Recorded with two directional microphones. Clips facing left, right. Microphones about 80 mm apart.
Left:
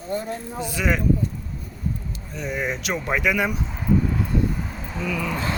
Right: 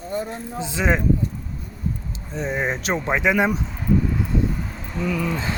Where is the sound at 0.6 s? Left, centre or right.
Right.